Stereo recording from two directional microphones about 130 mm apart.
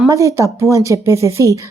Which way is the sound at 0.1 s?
25° right (ahead or behind).